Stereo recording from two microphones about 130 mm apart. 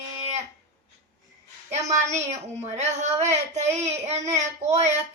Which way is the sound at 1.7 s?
60° right (ahead or behind).